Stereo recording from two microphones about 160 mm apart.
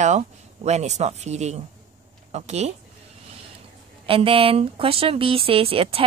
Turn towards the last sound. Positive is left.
turn(degrees=-35)  # may be behind; listen again after turning